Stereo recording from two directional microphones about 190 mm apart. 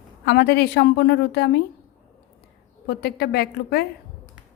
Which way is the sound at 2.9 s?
55° left (ahead or behind).